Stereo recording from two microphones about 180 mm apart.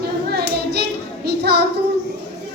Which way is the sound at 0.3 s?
65° right (ahead or behind).